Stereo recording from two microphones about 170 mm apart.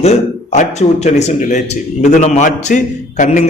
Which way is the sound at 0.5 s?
40° left (ahead or behind).